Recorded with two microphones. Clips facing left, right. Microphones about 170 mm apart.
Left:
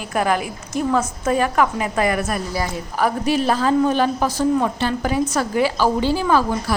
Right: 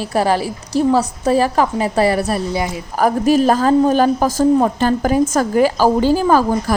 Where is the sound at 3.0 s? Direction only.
45° right (ahead or behind).